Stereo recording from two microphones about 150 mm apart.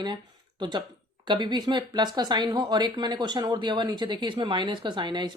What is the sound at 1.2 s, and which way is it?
Speech, 30° right (ahead or behind).